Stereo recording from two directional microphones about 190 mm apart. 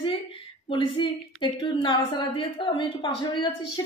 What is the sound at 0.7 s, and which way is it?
A woman's voice, 25° left (ahead or behind).